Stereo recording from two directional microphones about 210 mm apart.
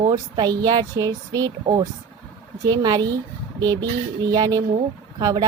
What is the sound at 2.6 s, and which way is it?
Speech, 20° right (ahead or behind).